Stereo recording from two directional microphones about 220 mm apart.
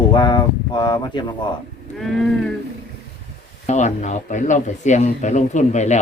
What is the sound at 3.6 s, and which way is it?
Speech, 35° left (ahead or behind).